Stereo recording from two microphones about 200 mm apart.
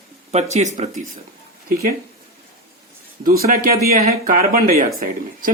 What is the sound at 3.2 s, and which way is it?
Speech, 45° right (ahead or behind).